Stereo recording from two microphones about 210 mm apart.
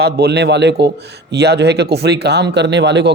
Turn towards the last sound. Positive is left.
turn(degrees=-55)  # may be behind; listen again after turning